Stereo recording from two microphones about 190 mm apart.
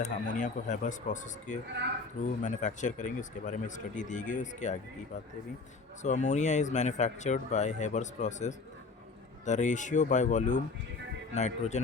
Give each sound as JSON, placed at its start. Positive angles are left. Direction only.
{"t": 0.0, "sound": "speech", "side_deg": 40}
{"t": 6.0, "sound": "speech", "side_deg": 40}